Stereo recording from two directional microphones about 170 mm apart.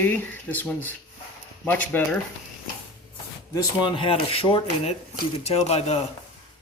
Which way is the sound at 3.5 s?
30° left (ahead or behind).